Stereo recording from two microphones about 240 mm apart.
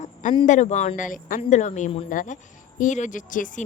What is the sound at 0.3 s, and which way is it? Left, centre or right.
Speech, left.